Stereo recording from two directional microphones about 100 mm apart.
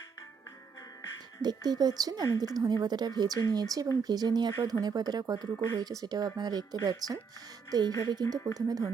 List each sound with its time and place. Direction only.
1.4 s a woman's voice: 45° right (ahead or behind)